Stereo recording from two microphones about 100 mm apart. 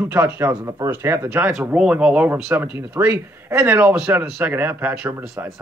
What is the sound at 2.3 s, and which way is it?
Speech, 20° right (ahead or behind).